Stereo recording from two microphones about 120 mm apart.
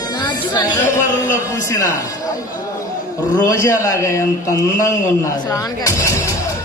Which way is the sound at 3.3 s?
30° left (ahead or behind).